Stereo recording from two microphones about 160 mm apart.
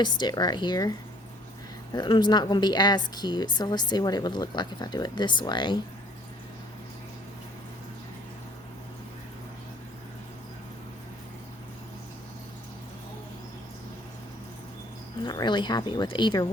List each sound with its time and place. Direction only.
0.0 s a woman's voice: 30° left (ahead or behind)
15.2 s speech: 25° left (ahead or behind)